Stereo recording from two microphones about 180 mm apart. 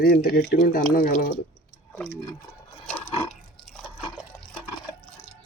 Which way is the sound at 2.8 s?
10° left (ahead or behind).